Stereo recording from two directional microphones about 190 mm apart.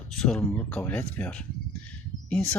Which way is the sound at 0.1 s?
5° left (ahead or behind).